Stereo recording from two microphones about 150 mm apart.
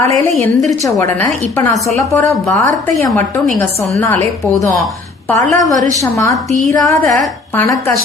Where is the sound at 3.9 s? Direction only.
10° left (ahead or behind).